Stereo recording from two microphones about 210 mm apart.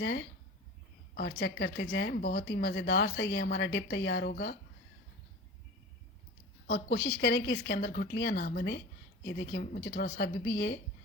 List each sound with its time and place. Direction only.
0.0 s speech: 55° left (ahead or behind)
6.7 s speech: 50° left (ahead or behind)